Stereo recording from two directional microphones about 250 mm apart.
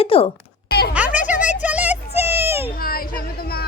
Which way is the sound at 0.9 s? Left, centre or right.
Centre.